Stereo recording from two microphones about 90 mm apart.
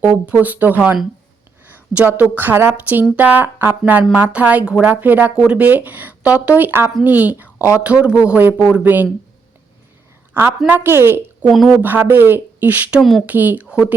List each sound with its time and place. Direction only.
0.0 s a woman's voice: 20° right (ahead or behind)
10.4 s speech: 25° right (ahead or behind)
11.5 s speech: centre (ahead or behind)
11.8 s speech: 20° right (ahead or behind)
13.0 s speech: centre (ahead or behind)
13.2 s a woman's voice: 20° right (ahead or behind)